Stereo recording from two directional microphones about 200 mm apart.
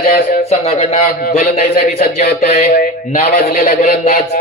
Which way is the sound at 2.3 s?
45° left (ahead or behind).